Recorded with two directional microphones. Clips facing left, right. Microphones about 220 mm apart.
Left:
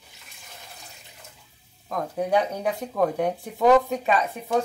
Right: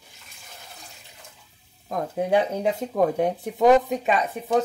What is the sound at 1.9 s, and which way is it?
Speech, 25° right (ahead or behind).